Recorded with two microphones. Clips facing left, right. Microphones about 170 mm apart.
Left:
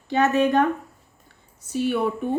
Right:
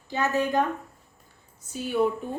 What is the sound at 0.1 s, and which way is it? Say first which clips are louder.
Speech: left 6 dB; 70° left (ahead or behind).